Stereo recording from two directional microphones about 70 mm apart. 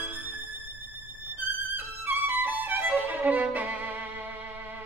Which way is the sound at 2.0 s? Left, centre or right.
Right.